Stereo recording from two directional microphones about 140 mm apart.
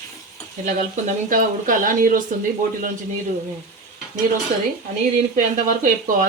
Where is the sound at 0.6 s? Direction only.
70° right (ahead or behind).